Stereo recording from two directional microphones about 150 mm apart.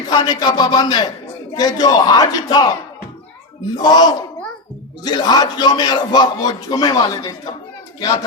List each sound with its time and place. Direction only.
0.1 s a man's voice: 25° left (ahead or behind)
3.8 s a man's voice: 25° left (ahead or behind)